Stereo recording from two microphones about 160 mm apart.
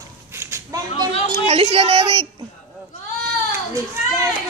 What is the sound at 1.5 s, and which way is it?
Speech, 35° right (ahead or behind).